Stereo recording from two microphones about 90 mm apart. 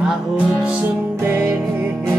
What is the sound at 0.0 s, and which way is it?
Music, 5° right (ahead or behind).